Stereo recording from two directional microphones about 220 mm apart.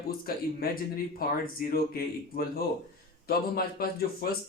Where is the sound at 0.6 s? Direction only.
40° left (ahead or behind).